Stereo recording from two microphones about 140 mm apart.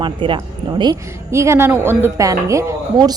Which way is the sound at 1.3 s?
20° right (ahead or behind).